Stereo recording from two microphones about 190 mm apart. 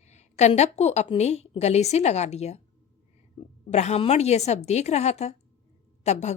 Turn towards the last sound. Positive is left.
turn(degrees=35)  # may be behind; listen again after turning